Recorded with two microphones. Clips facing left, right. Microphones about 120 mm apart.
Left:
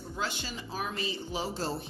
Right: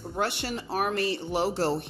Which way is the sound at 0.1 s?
65° right (ahead or behind).